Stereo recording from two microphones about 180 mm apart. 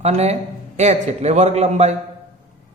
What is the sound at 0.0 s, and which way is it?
A man's voice, 35° right (ahead or behind).